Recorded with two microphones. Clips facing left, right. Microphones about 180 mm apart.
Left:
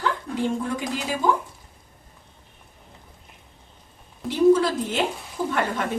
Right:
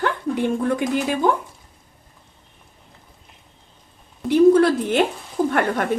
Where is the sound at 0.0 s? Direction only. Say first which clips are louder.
Right 4 dB; 60° right (ahead or behind).